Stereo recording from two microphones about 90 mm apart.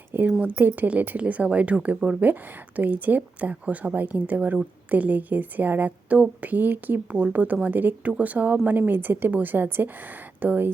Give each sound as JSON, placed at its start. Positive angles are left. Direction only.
{"t": 0.1, "sound": "a woman's voice", "side_deg": -20}